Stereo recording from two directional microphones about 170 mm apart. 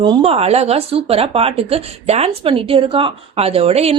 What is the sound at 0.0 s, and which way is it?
Speech, 30° right (ahead or behind).